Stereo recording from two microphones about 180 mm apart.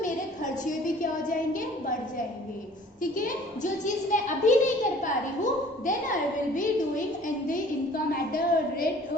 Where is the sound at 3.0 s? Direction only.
50° left (ahead or behind).